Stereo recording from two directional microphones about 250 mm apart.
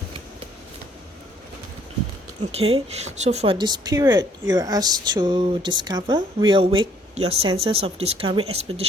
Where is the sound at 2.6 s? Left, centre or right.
Right.